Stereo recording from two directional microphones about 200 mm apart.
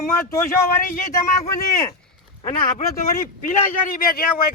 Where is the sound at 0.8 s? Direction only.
45° left (ahead or behind).